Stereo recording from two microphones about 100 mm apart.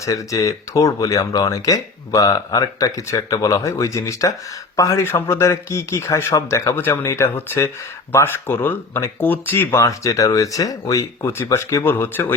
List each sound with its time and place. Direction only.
0.0 s a man's voice: 35° left (ahead or behind)
9.8 s a man's voice: 35° left (ahead or behind)
11.8 s a man's voice: 20° left (ahead or behind)